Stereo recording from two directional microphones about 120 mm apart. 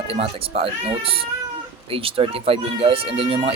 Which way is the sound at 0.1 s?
50° right (ahead or behind).